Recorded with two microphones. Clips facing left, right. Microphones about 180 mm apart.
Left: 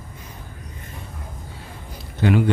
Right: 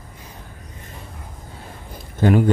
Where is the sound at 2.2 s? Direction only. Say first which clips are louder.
Right 2 dB; 45° right (ahead or behind).